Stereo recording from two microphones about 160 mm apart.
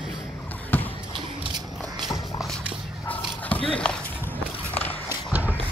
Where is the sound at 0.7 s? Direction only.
10° left (ahead or behind).